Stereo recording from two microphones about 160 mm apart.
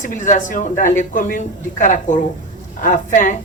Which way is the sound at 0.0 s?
50° left (ahead or behind).